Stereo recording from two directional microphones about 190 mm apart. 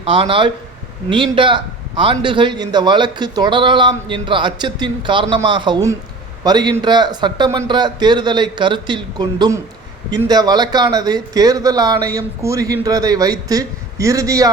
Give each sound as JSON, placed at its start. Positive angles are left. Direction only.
{"t": 0.1, "sound": "a man's voice", "side_deg": -25}